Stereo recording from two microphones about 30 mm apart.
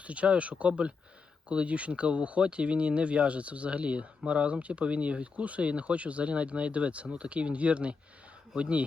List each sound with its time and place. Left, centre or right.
0.0 s speech: right